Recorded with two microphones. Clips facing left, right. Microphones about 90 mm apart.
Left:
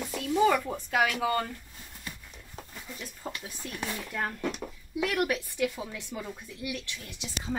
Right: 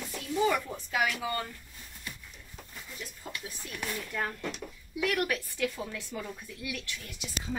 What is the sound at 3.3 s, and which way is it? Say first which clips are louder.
Speech: left 4 dB; 35° left (ahead or behind).